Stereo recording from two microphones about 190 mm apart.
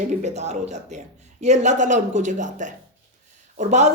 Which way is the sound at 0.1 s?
35° right (ahead or behind).